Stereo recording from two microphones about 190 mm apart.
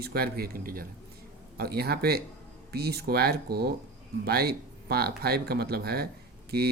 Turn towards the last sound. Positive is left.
turn(degrees=-55)  # may be behind; listen again after turning